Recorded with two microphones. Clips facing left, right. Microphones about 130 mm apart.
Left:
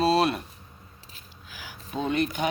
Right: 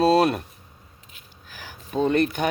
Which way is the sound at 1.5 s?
45° right (ahead or behind).